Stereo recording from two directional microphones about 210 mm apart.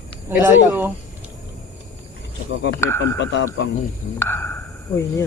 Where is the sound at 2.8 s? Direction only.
10° left (ahead or behind).